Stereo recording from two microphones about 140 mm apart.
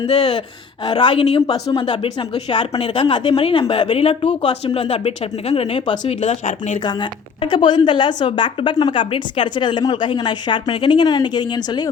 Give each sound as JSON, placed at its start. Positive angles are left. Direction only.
{"t": 0.1, "sound": "speech", "side_deg": 30}